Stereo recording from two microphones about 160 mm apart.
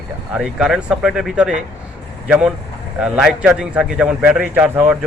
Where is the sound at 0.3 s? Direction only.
5° right (ahead or behind).